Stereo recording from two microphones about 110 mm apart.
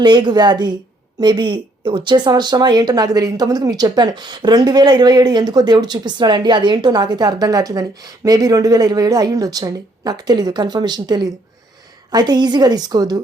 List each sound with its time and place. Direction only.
0.0 s a woman's voice: 45° right (ahead or behind)